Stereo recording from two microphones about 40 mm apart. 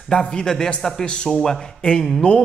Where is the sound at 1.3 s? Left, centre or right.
Centre.